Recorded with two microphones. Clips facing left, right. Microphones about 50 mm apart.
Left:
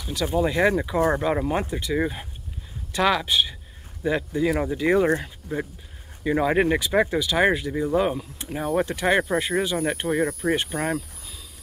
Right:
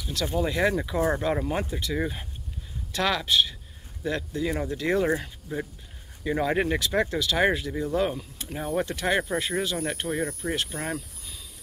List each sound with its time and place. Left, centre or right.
0.0 s speech: centre
6.2 s speech: centre